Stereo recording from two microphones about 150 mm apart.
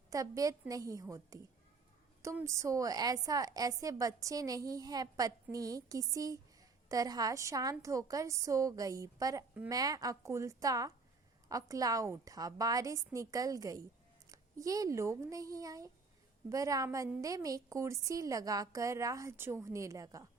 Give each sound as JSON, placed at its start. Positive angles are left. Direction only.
{"t": 0.1, "sound": "a woman's voice", "side_deg": -20}